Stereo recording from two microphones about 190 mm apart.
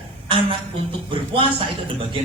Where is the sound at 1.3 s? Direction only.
25° right (ahead or behind).